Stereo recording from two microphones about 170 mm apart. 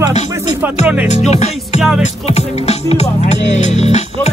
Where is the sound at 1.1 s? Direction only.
40° left (ahead or behind).